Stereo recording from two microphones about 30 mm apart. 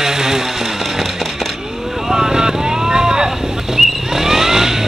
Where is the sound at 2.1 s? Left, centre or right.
Right.